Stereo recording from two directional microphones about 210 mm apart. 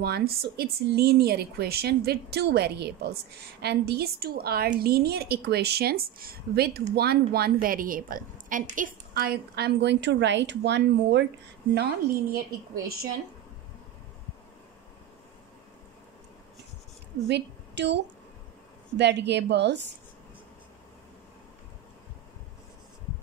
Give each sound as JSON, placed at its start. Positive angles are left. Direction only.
{"t": 0.0, "sound": "a woman's voice", "side_deg": -50}
{"t": 17.3, "sound": "a woman's voice", "side_deg": -55}